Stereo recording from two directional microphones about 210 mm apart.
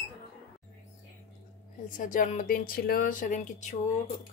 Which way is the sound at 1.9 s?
40° left (ahead or behind).